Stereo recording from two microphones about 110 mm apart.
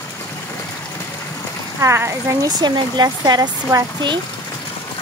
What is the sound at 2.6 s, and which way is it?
Speech, 35° right (ahead or behind).